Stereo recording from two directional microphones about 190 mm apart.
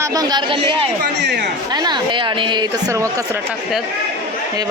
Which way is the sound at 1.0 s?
60° right (ahead or behind).